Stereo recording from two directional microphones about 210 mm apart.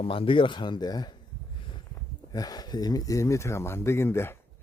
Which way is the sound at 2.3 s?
20° left (ahead or behind).